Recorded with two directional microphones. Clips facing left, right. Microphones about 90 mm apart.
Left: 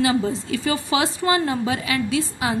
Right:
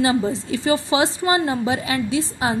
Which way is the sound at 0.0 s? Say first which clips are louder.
Right 1 dB; 25° right (ahead or behind).